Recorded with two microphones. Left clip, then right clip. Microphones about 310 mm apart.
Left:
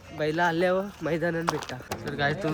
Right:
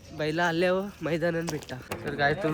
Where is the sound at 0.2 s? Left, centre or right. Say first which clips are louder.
Left 1 dB; centre.